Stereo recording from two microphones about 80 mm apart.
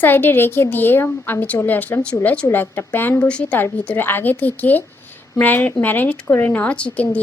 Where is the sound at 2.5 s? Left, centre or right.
Left.